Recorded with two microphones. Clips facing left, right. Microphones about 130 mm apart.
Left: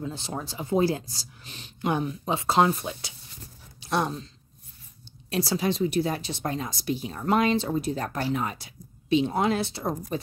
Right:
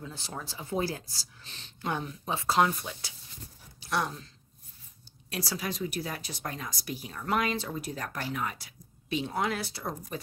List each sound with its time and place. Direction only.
0.0 s a woman's voice: 25° left (ahead or behind)
5.3 s a woman's voice: 25° left (ahead or behind)